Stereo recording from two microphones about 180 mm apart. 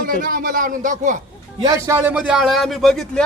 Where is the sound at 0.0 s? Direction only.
50° right (ahead or behind).